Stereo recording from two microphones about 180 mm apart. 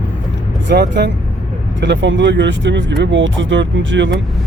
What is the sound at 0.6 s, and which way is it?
Speech, 65° right (ahead or behind).